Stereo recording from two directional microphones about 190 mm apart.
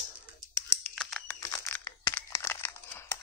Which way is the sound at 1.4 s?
15° left (ahead or behind).